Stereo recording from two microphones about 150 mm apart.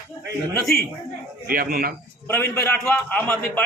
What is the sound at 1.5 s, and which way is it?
Speech, 80° right.